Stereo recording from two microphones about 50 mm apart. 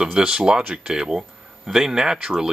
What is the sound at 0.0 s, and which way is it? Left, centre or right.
Speech, centre.